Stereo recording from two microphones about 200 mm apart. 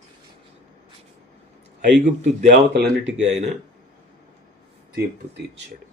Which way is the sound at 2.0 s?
40° right (ahead or behind).